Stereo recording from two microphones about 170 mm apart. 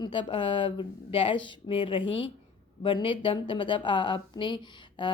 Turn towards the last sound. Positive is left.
turn(degrees=25)  # may be behind; listen again after turning